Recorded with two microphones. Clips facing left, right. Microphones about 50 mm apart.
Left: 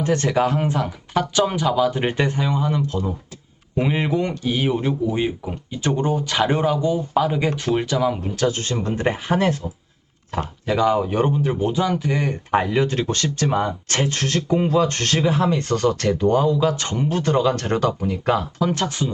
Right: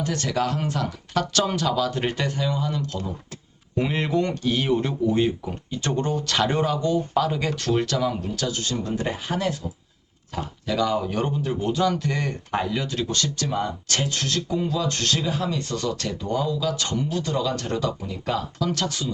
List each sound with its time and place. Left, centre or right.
0.0 s speech: left
8.4 s speech: left
10.7 s speech: left
18.6 s speech: left